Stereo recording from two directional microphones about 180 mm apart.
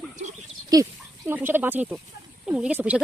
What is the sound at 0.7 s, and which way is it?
Speech, 20° right (ahead or behind).